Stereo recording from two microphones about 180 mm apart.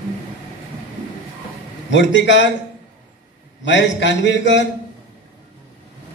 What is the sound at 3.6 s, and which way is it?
A man's voice, 85° left.